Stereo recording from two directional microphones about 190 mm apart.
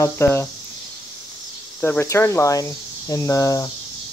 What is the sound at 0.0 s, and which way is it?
Speech, 15° left (ahead or behind).